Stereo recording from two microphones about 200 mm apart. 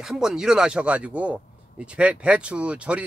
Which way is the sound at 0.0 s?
Centre (ahead or behind).